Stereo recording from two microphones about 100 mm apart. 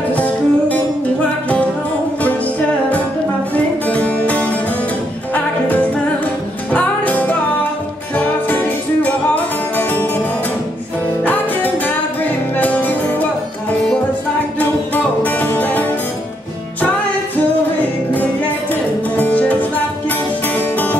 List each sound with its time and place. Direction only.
0.1 s music: 15° left (ahead or behind)
3.5 s music: 15° left (ahead or behind)
11.2 s music: 20° left (ahead or behind)
15.2 s music: 20° left (ahead or behind)
19.1 s music: 15° left (ahead or behind)